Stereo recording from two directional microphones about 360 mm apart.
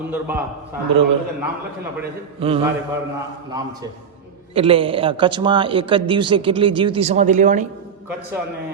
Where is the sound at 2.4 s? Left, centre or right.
Centre.